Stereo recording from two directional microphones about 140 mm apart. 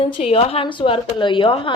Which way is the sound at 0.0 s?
45° left (ahead or behind).